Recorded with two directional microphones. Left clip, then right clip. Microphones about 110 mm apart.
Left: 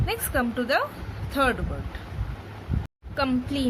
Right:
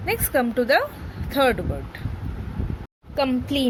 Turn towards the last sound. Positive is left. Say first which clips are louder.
# right 4 dB
turn(degrees=-45)  # may be behind; listen again after turning